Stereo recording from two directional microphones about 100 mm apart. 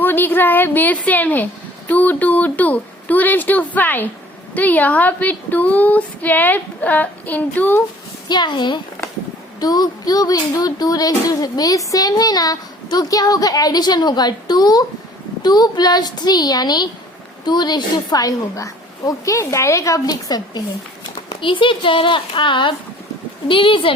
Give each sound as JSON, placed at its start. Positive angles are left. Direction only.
{"t": 0.0, "sound": "a woman's voice", "side_deg": 20}
{"t": 8.3, "sound": "a woman's voice", "side_deg": 45}
{"t": 21.2, "sound": "speech", "side_deg": 60}